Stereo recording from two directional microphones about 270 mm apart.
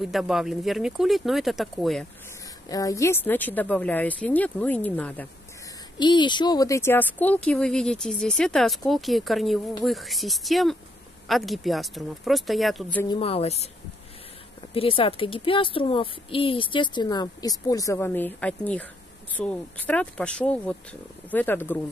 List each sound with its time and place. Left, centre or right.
0.0 s speech: centre
2.7 s speech: centre
5.9 s speech: centre
13.1 s a woman's voice: left
14.7 s a woman's voice: left